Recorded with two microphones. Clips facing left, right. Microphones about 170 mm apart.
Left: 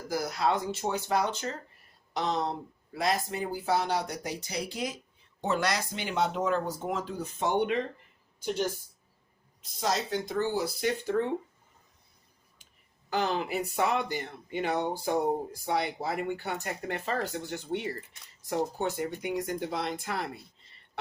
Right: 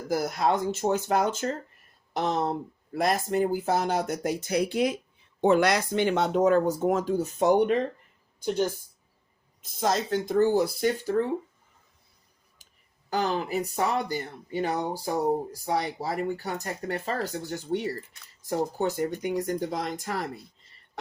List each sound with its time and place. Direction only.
0.1 s speech: 50° right (ahead or behind)
9.6 s speech: 50° right (ahead or behind)
13.1 s speech: 40° right (ahead or behind)